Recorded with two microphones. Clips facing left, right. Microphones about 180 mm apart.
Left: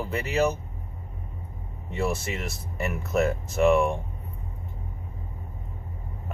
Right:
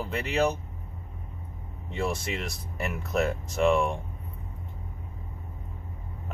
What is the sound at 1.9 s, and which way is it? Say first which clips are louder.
Speech: left 2 dB; 5° left (ahead or behind).